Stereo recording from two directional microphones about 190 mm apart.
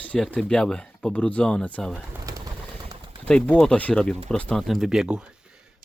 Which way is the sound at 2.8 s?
25° right (ahead or behind).